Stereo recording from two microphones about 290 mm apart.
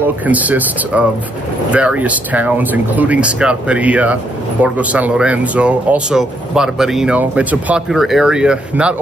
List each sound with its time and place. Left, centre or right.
0.0 s speech: centre